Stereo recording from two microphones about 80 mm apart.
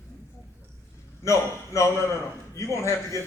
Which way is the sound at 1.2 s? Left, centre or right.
Left.